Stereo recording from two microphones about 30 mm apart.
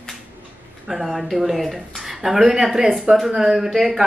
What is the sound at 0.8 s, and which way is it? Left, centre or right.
A woman's voice, centre.